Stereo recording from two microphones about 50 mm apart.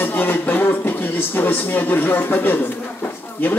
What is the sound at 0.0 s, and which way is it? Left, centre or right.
Speech, left.